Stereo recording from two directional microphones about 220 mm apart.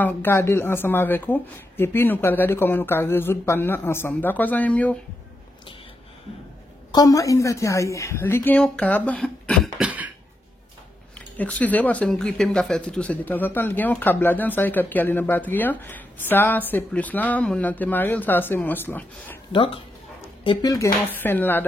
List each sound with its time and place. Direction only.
0.0 s speech: 10° left (ahead or behind)
6.9 s speech: 15° left (ahead or behind); by 10.1 s 5° right (ahead or behind)
11.1 s speech: 5° left (ahead or behind)
19.5 s speech: 25° left (ahead or behind); by 21.6 s 10° left (ahead or behind)